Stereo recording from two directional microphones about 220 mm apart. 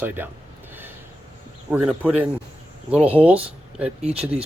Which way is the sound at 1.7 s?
5° right (ahead or behind).